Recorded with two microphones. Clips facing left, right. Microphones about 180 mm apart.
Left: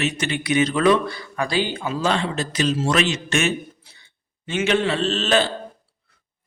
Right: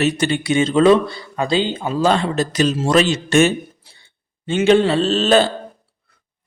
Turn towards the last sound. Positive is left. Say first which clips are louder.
# right 6 dB
turn(degrees=-35)  # may be behind; listen again after turning